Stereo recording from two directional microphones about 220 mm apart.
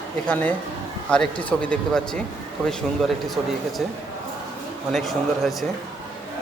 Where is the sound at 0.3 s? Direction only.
5° left (ahead or behind).